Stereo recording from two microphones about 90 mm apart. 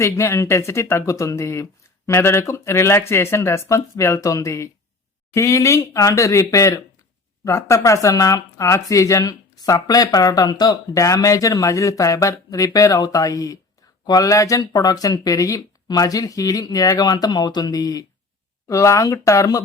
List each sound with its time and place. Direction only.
0.0 s speech: 30° left (ahead or behind)